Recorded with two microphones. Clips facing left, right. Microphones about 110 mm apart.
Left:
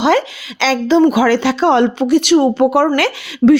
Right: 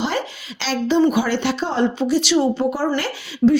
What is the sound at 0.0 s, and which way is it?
A woman's voice, 90° left.